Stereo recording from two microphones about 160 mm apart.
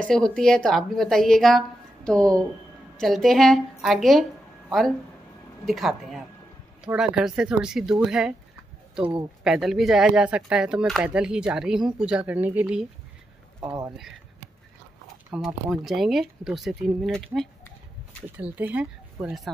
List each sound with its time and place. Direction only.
0.0 s speech: 5° left (ahead or behind)
9.4 s speech: centre (ahead or behind)
13.6 s speech: 20° right (ahead or behind)
15.3 s speech: centre (ahead or behind)
18.4 s speech: 10° right (ahead or behind)